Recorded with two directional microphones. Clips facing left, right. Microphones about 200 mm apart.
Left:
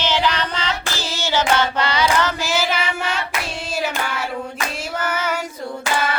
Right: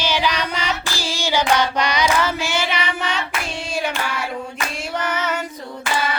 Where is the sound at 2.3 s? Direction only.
5° left (ahead or behind).